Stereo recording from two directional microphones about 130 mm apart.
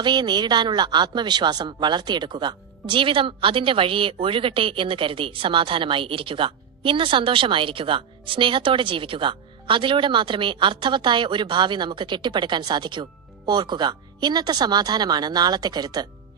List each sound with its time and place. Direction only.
0.0 s speech: 35° right (ahead or behind)